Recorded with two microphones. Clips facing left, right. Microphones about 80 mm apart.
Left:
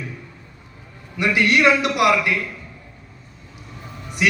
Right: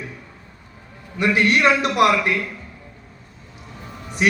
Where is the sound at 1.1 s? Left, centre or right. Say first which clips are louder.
Even; right.